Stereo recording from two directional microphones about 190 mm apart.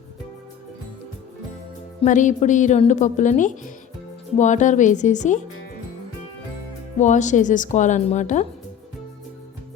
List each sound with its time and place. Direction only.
2.0 s speech: 40° left (ahead or behind)
7.0 s speech: 40° left (ahead or behind)